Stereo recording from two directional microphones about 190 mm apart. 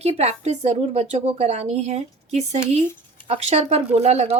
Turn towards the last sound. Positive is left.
turn(degrees=-35)  # may be behind; listen again after turning